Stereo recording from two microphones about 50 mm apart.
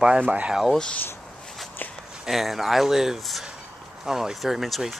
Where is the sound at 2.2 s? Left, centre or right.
Centre.